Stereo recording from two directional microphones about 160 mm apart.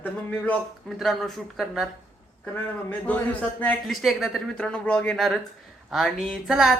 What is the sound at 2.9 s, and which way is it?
Speech, 10° left (ahead or behind).